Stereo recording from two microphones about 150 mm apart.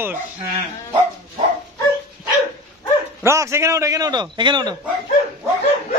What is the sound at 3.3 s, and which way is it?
A man's voice, 20° right (ahead or behind).